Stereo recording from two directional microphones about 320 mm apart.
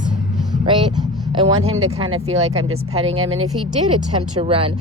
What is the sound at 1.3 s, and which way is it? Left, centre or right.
Speech, centre.